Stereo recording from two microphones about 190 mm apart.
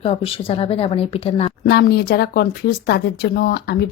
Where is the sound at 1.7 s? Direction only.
55° left (ahead or behind).